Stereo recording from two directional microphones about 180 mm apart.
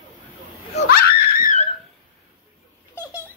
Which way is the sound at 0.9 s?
55° left (ahead or behind).